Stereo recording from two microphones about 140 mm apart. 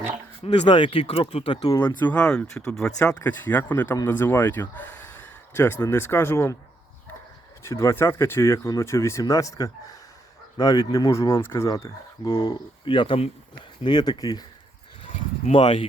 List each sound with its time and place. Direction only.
0.4 s speech: 45° left (ahead or behind)
1.6 s speech: 20° left (ahead or behind)
2.0 s speech: 10° left (ahead or behind)
7.6 s speech: 20° left (ahead or behind); by 13.3 s 40° left (ahead or behind)
13.8 s speech: 30° left (ahead or behind)
15.4 s speech: 50° left (ahead or behind)